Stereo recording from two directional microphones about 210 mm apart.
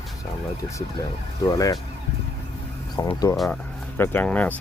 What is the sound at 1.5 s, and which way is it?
Speech, 15° left (ahead or behind).